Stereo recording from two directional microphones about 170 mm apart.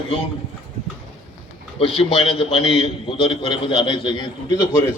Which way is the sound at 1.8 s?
35° left (ahead or behind).